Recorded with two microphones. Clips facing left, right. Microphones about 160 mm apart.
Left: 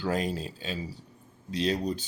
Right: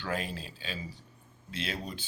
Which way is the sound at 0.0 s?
35° left (ahead or behind).